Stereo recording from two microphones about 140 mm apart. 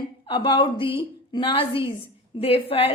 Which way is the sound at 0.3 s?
35° left (ahead or behind).